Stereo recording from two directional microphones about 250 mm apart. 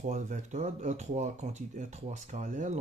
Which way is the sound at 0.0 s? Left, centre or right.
Right.